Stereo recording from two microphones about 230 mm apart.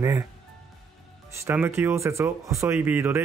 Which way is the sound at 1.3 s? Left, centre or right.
Centre.